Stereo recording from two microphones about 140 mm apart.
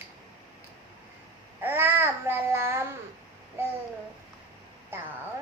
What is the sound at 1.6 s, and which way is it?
Babbling, 15° right (ahead or behind).